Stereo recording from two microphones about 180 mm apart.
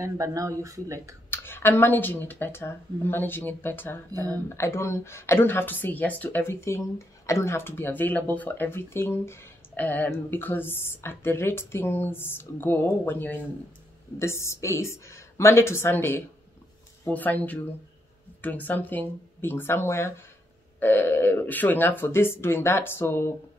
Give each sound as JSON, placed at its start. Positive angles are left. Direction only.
{"t": 0.0, "sound": "speech", "side_deg": -15}
{"t": 1.3, "sound": "speech", "side_deg": 10}
{"t": 4.1, "sound": "speech", "side_deg": -20}
{"t": 4.5, "sound": "speech", "side_deg": 15}